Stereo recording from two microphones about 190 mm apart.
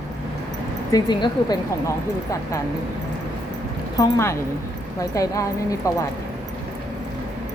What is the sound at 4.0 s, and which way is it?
Speech, 15° left (ahead or behind).